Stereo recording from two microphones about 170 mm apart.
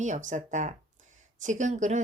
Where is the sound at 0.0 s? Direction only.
45° right (ahead or behind).